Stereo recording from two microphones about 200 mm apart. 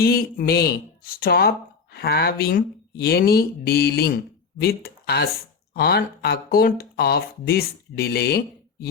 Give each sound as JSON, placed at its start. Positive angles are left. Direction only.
{"t": 0.0, "sound": "speech", "side_deg": 50}